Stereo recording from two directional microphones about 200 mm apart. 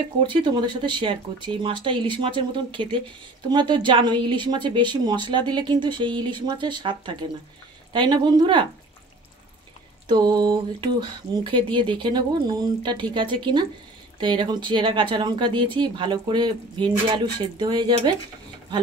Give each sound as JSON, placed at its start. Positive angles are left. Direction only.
{"t": 0.2, "sound": "speech", "side_deg": -25}
{"t": 10.0, "sound": "speech", "side_deg": -20}